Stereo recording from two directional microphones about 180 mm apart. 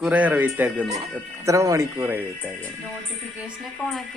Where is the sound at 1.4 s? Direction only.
15° right (ahead or behind).